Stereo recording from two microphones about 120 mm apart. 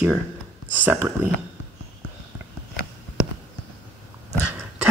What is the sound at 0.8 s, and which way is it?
Speech, 20° right (ahead or behind).